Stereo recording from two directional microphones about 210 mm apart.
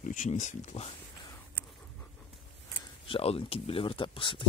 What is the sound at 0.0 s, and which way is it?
Speech, 40° left (ahead or behind).